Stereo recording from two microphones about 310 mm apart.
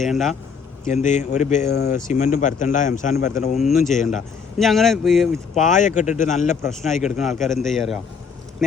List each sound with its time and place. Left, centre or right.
0.0 s speech: centre
0.9 s speech: left
4.5 s speech: centre
5.6 s speech: left
6.6 s speech: centre